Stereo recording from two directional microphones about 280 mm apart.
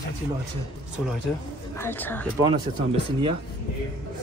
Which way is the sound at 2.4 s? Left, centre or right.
Centre.